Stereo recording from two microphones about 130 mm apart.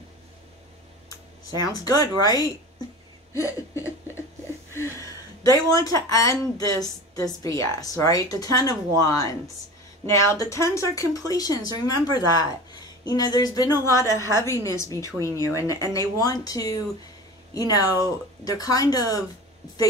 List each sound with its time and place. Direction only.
1.6 s a woman's voice: 30° left (ahead or behind)
3.3 s laughter: 25° left (ahead or behind)
5.5 s a woman's voice: 25° left (ahead or behind)